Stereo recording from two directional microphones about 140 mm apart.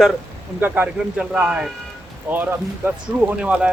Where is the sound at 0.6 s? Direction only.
10° right (ahead or behind).